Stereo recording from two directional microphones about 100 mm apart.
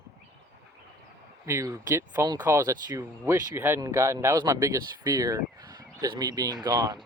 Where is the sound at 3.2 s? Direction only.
25° right (ahead or behind).